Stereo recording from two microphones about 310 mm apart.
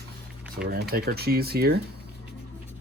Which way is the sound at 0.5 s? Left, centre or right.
Right.